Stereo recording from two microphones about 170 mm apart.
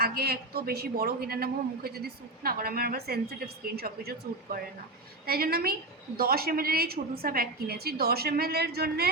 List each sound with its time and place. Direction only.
0.0 s a man's voice: 65° right (ahead or behind)
5.2 s a man's voice: 65° right (ahead or behind)